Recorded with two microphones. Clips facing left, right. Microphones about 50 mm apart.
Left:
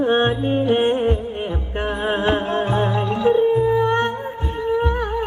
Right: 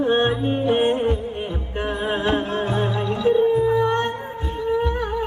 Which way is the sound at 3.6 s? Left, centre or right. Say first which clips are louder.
Left 1 dB; centre.